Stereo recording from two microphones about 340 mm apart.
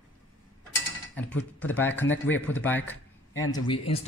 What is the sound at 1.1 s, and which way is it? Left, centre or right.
Speech, centre.